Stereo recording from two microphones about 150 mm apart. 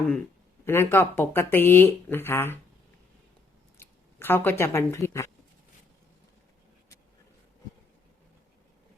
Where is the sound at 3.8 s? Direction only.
15° left (ahead or behind).